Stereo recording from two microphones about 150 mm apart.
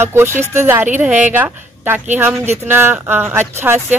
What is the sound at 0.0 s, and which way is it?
Speech, 15° right (ahead or behind).